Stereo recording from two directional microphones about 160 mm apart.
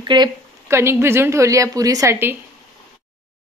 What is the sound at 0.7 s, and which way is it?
Speech, 15° right (ahead or behind).